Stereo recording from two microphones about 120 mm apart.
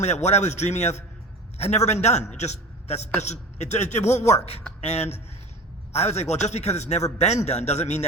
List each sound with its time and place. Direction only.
0.0 s a man's voice: 70° left (ahead or behind)
4.8 s a man's voice: 60° left (ahead or behind)